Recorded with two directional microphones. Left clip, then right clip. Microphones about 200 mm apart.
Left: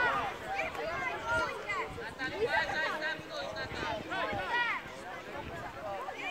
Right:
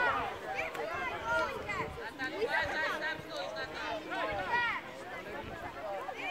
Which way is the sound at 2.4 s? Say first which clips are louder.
Left 1 dB; 20° right (ahead or behind).